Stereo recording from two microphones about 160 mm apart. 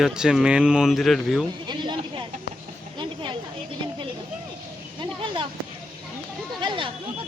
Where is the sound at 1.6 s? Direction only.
30° right (ahead or behind).